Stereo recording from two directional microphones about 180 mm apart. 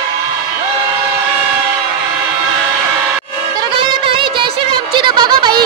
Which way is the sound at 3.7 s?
30° right (ahead or behind).